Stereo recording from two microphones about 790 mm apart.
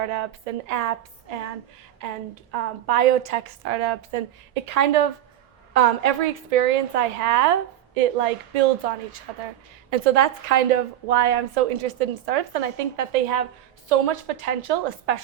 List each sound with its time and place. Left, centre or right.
0.0 s a woman's voice: right